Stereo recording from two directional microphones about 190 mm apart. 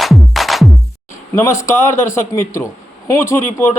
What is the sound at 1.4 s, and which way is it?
Speech, 15° left (ahead or behind).